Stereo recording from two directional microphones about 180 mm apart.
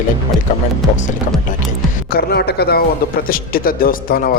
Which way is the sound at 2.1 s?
65° left (ahead or behind).